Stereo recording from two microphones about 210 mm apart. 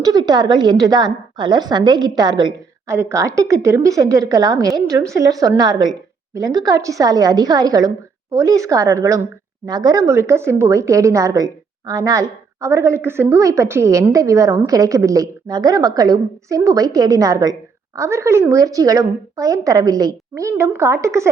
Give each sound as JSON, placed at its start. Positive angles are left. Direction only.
{"t": 0.0, "sound": "a woman's voice", "side_deg": -20}